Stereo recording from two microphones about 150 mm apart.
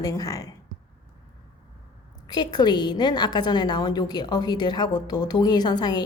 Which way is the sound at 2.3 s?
30° left (ahead or behind).